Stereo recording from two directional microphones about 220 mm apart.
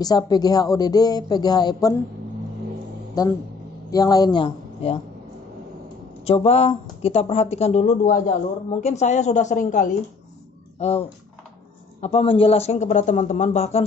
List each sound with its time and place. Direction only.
0.0 s speech: 15° left (ahead or behind)
3.2 s a man's voice: 15° left (ahead or behind)
6.2 s a man's voice: 25° left (ahead or behind)